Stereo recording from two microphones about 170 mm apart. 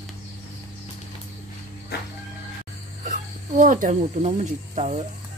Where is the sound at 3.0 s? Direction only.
50° right (ahead or behind).